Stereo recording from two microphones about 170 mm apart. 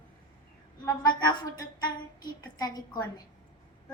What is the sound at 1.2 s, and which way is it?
A child's voice, 25° left (ahead or behind).